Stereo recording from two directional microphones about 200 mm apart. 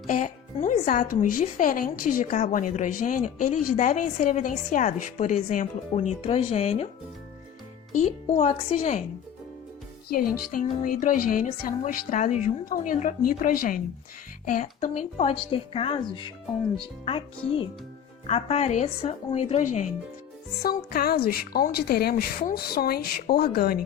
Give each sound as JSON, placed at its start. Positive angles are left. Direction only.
{"t": 0.1, "sound": "speech", "side_deg": 40}
{"t": 7.9, "sound": "speech", "side_deg": 35}
{"t": 10.1, "sound": "a woman's voice", "side_deg": 45}
{"t": 20.6, "sound": "a woman's voice", "side_deg": 50}